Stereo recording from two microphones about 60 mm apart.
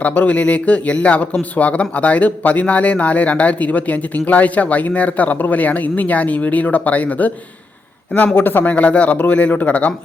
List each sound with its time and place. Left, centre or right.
0.0 s speech: left
8.4 s speech: left
8.7 s speech: left